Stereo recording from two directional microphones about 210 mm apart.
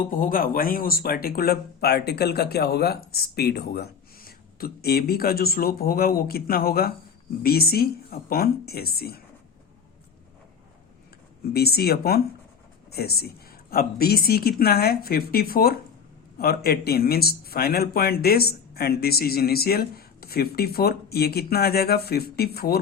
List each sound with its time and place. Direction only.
0.1 s speech: 40° left (ahead or behind)
11.5 s speech: 50° left (ahead or behind)